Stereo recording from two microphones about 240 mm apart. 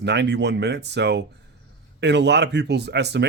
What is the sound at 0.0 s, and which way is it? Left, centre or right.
Speech, right.